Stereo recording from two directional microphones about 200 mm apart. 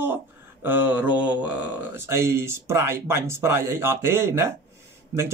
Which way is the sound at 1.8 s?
10° right (ahead or behind).